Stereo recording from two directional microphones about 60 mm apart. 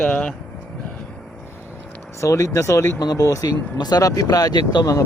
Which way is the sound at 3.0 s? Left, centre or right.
Left.